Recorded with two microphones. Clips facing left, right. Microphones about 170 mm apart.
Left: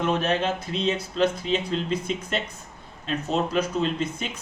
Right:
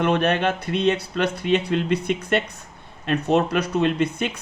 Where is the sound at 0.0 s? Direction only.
65° right (ahead or behind).